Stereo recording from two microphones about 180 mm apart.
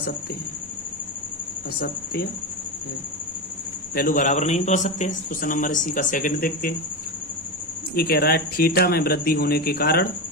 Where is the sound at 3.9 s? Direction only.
50° left (ahead or behind).